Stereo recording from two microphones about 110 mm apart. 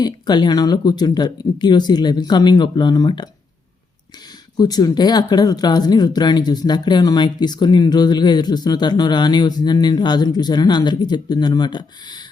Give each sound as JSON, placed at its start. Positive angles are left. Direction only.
{"t": 0.0, "sound": "speech", "side_deg": 40}
{"t": 4.5, "sound": "speech", "side_deg": 35}